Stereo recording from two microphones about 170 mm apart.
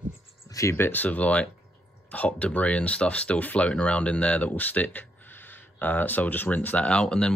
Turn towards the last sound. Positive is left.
turn(degrees=5)  # may be behind; listen again after turning